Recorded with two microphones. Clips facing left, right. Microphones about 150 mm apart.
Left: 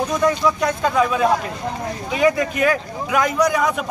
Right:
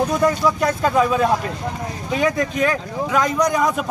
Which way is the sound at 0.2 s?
5° right (ahead or behind).